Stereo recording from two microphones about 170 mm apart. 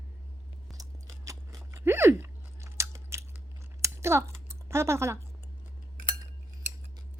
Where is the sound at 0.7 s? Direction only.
20° right (ahead or behind).